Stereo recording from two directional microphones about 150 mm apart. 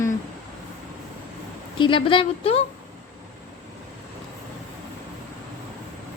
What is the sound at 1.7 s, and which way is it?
Speech, 35° left (ahead or behind).